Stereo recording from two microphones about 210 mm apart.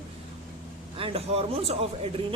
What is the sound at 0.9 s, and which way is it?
Speech, 25° right (ahead or behind).